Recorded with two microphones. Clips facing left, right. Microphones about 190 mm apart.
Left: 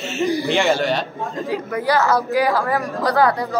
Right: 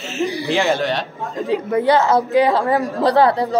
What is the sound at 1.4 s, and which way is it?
Speech, 25° right (ahead or behind).